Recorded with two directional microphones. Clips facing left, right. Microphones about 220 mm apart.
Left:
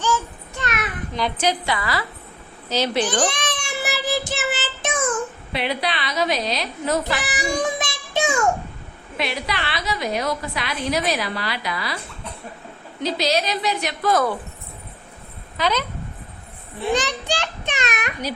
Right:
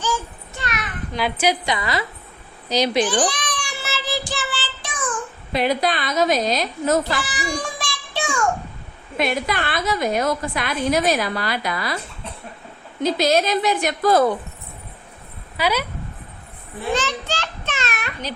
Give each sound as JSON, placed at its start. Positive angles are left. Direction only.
{"t": 1.1, "sound": "a woman's voice", "side_deg": -5}
{"t": 3.2, "sound": "cat", "side_deg": 25}
{"t": 3.8, "sound": "child singing", "side_deg": 15}
{"t": 5.5, "sound": "a woman's voice", "side_deg": -45}
{"t": 7.2, "sound": "child singing", "side_deg": 20}
{"t": 9.1, "sound": "a woman's voice", "side_deg": -50}
{"t": 13.0, "sound": "a woman's voice", "side_deg": -50}
{"t": 14.1, "sound": "a woman's voice", "side_deg": -30}
{"t": 15.5, "sound": "a woman's voice", "side_deg": -10}
{"t": 16.9, "sound": "a sound", "side_deg": 15}